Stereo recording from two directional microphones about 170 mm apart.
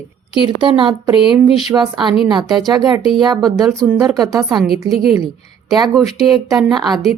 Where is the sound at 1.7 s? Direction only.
15° right (ahead or behind).